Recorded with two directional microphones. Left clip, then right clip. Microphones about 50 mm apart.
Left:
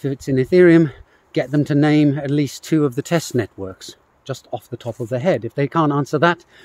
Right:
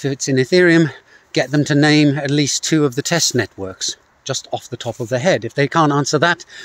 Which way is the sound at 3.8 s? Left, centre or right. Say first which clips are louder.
Right 14 dB; centre.